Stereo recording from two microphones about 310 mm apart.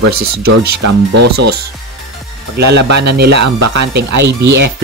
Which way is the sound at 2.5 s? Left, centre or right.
Right.